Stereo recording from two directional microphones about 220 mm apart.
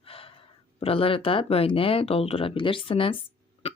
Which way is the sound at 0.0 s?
25° left (ahead or behind).